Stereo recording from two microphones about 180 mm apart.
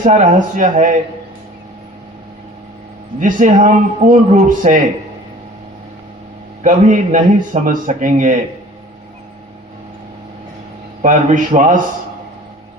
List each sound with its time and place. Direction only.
0.0 s a man's voice: 45° right (ahead or behind)
3.2 s a man's voice: 45° right (ahead or behind)
6.6 s a man's voice: 45° right (ahead or behind)
11.0 s a man's voice: 45° right (ahead or behind)